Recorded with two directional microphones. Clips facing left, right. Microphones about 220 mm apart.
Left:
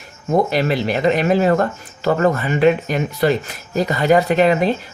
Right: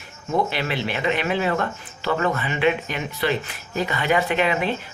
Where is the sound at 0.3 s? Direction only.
40° left (ahead or behind).